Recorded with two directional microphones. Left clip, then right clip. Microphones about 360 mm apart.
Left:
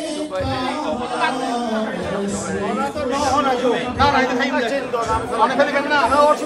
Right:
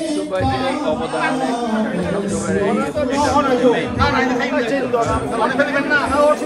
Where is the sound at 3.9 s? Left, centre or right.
Left.